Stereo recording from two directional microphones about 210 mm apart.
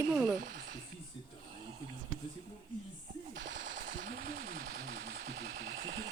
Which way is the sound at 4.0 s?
45° right (ahead or behind).